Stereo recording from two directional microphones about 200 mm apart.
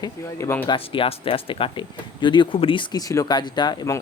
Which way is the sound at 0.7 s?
25° left (ahead or behind).